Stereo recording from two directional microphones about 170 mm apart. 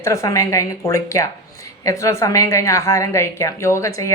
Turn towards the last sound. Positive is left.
turn(degrees=20)  # may be behind; listen again after turning